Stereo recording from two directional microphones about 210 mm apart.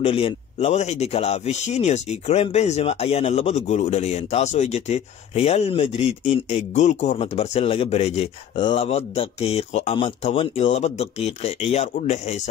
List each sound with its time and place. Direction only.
0.0 s speech: 25° left (ahead or behind)